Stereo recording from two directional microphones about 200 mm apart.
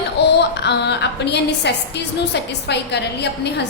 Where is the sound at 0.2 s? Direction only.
60° left (ahead or behind).